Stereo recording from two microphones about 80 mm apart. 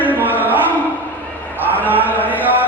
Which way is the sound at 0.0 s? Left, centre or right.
Right.